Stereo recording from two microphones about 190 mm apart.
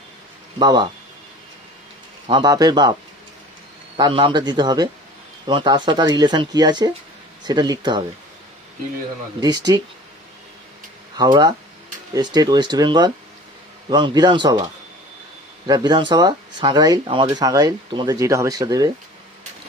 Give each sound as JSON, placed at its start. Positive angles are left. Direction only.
{"t": 0.6, "sound": "speech", "side_deg": -20}
{"t": 2.2, "sound": "speech", "side_deg": -25}
{"t": 3.9, "sound": "speech", "side_deg": -25}
{"t": 9.4, "sound": "speech", "side_deg": -20}
{"t": 11.2, "sound": "speech", "side_deg": -20}
{"t": 15.6, "sound": "speech", "side_deg": -20}